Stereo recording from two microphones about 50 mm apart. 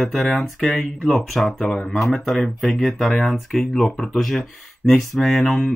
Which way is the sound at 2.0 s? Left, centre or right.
Centre.